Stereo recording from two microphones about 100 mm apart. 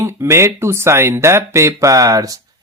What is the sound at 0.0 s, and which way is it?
Speech, 30° right (ahead or behind).